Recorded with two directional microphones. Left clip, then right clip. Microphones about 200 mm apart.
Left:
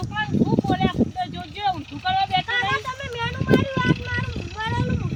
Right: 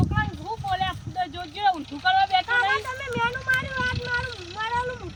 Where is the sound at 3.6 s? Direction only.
35° right (ahead or behind).